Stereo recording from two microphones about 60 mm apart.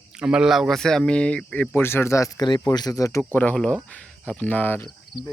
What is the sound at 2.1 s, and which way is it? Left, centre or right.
Speech, left.